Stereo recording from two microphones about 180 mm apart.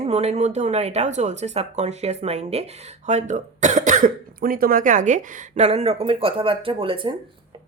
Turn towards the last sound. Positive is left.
turn(degrees=-30)  # may be behind; listen again after turning